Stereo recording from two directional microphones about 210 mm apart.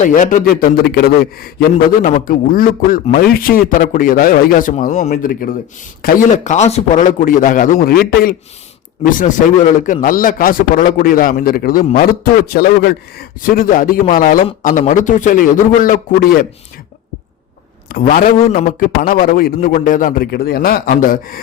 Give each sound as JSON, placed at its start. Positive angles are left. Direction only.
{"t": 0.0, "sound": "a man's voice", "side_deg": 40}
{"t": 9.0, "sound": "a man's voice", "side_deg": 30}
{"t": 17.8, "sound": "a man's voice", "side_deg": 45}